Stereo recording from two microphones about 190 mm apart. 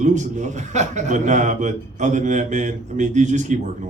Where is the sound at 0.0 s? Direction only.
40° right (ahead or behind).